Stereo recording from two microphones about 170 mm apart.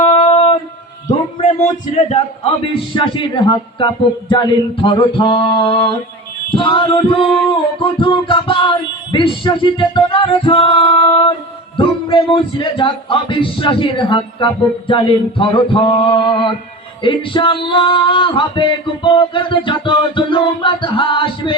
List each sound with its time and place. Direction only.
0.0 s a sound: 35° left (ahead or behind)
2.0 s music: 35° left (ahead or behind)
2.9 s speech: 30° left (ahead or behind)
6.5 s music: 30° left (ahead or behind)
11.8 s speech: 30° left (ahead or behind)